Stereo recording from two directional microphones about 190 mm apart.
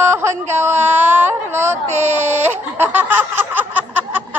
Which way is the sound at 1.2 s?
10° right (ahead or behind).